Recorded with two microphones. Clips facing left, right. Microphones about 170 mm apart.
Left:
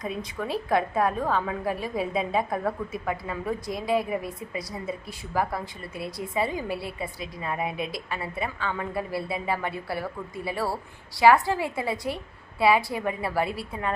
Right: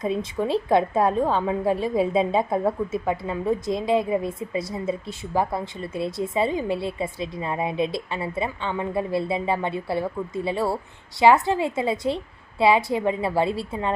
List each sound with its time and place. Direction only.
0.0 s a woman's voice: 25° right (ahead or behind)